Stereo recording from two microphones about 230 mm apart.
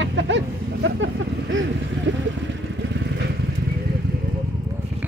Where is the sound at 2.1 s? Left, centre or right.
Right.